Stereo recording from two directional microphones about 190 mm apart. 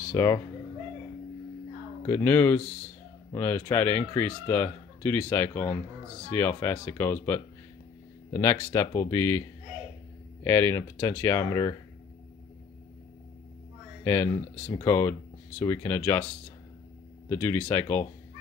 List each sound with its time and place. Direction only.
0.1 s speech: 15° left (ahead or behind)
2.0 s speech: 10° left (ahead or behind)
10.4 s speech: 15° left (ahead or behind)
14.0 s speech: 15° left (ahead or behind)
17.3 s speech: 10° left (ahead or behind)